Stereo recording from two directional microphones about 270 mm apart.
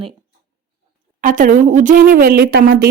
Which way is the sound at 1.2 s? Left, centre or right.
Right.